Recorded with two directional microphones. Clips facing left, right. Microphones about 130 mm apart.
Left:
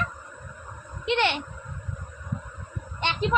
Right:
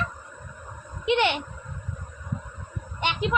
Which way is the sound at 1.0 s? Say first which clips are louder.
Right 2 dB; 15° right (ahead or behind).